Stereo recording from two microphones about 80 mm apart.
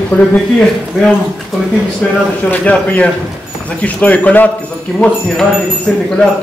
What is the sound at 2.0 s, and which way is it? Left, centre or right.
Speech, centre.